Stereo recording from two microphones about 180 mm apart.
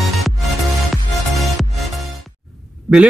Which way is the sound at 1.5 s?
Centre (ahead or behind).